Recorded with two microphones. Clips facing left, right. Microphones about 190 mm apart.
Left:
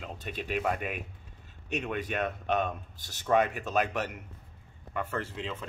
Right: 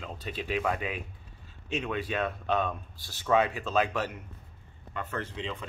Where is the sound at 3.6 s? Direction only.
20° left (ahead or behind).